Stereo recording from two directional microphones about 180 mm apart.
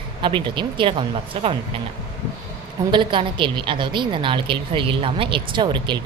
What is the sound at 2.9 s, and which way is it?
Speech, 25° right (ahead or behind).